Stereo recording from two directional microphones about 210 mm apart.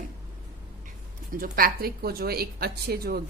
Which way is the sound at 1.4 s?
45° right (ahead or behind).